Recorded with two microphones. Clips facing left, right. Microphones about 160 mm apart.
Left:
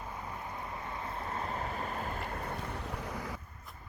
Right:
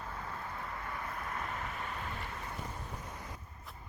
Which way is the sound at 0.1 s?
15° left (ahead or behind).